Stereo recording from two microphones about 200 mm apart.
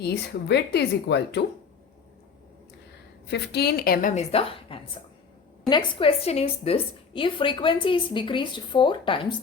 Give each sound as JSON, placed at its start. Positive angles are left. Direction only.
{"t": 0.0, "sound": "speech", "side_deg": 55}
{"t": 3.2, "sound": "a woman's voice", "side_deg": 55}